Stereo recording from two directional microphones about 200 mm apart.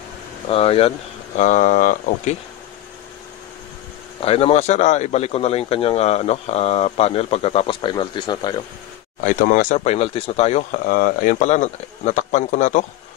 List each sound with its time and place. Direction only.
0.5 s speech: 30° left (ahead or behind)
4.2 s speech: 30° left (ahead or behind)
9.2 s speech: 40° left (ahead or behind)